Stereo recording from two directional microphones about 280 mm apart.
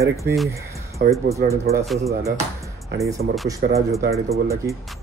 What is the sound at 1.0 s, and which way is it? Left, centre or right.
Speech, right.